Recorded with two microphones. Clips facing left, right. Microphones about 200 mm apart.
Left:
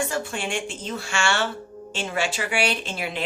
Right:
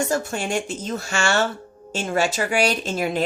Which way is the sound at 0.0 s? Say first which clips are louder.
Right 4 dB; 40° right (ahead or behind).